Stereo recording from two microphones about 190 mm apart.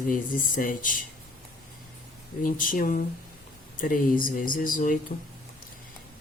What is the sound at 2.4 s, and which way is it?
Speech, 45° left (ahead or behind).